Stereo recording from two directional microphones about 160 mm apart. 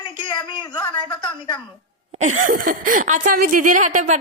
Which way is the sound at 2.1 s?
50° right (ahead or behind).